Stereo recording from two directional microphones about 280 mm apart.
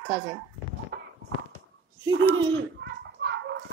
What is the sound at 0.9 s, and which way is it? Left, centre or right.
Walk, right.